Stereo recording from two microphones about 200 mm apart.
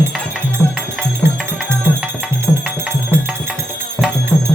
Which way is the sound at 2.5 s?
5° left (ahead or behind).